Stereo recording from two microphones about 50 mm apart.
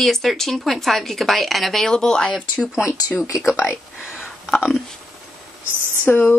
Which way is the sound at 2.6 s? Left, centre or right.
Centre.